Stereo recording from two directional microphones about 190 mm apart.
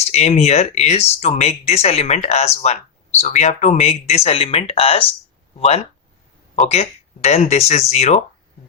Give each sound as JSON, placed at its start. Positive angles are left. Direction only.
{"t": 0.1, "sound": "speech", "side_deg": 35}